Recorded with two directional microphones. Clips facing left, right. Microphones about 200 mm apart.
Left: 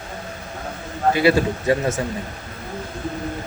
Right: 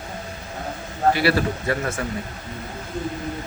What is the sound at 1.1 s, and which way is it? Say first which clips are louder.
Speech: left 4 dB; 20° left (ahead or behind).